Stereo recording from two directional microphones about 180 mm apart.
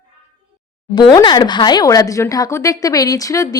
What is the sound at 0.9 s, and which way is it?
Speech, 25° left (ahead or behind).